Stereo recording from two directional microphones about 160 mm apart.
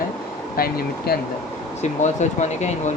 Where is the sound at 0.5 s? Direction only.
70° left (ahead or behind).